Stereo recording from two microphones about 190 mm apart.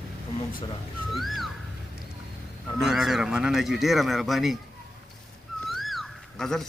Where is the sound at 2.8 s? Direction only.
Centre (ahead or behind).